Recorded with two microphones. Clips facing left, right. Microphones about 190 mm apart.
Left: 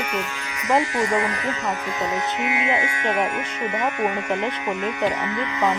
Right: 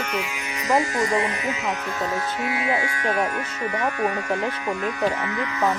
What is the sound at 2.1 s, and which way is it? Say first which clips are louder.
Speech: left 1 dB; 20° left (ahead or behind).